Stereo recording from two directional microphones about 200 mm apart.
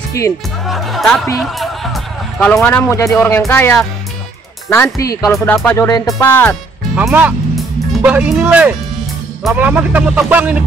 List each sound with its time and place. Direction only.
0.2 s speech: 15° left (ahead or behind)
0.7 s speech: centre (ahead or behind)
7.0 s speech: 5° right (ahead or behind)